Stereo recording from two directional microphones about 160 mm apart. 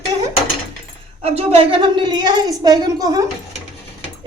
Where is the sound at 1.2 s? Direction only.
40° right (ahead or behind); by 3.3 s 25° right (ahead or behind).